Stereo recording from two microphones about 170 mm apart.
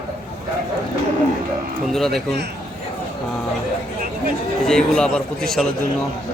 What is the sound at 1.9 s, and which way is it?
Speech, centre (ahead or behind).